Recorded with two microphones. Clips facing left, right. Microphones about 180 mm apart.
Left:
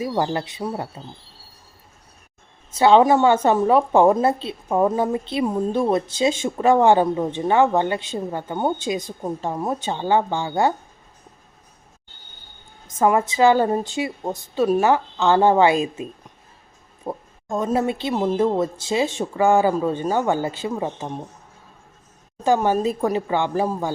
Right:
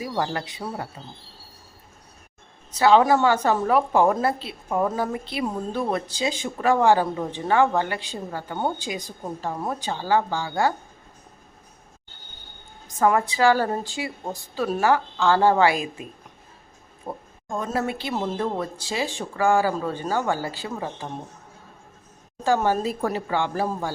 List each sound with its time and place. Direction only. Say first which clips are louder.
0.0 s a woman's voice: left 4 dB; 25° left (ahead or behind)
2.7 s a woman's voice: left 3 dB; 25° left (ahead or behind)
13.0 s a woman's voice: left 3 dB; 20° left (ahead or behind)
17.1 s a woman's voice: left 4 dB; 20° left (ahead or behind)
22.4 s a woman's voice: left 3 dB; 15° left (ahead or behind)